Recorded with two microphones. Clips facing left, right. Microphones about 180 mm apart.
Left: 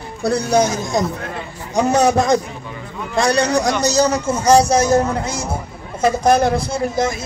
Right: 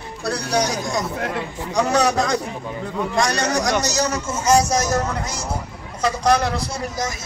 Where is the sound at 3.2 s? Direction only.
30° left (ahead or behind).